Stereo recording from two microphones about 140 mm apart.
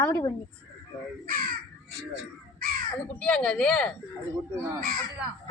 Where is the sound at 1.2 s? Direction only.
90° right.